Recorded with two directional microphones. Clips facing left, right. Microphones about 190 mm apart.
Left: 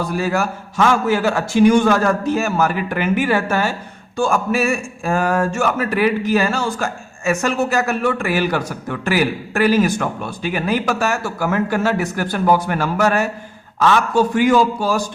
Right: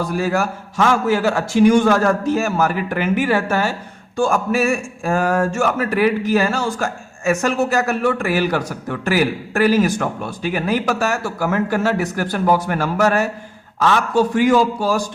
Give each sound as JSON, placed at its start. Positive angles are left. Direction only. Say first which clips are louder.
{"t": 0.0, "sound": "a man's voice", "louder": "even", "side_deg": -45}